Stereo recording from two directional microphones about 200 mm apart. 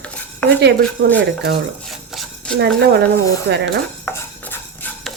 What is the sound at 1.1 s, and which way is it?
Speech, 60° right (ahead or behind).